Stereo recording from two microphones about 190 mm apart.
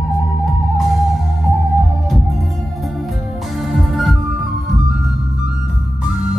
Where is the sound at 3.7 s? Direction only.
Centre (ahead or behind).